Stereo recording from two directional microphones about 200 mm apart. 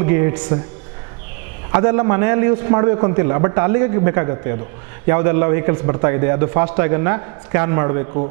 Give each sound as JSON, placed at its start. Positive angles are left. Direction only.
{"t": 0.0, "sound": "a man's voice", "side_deg": -15}
{"t": 1.7, "sound": "a man's voice", "side_deg": -15}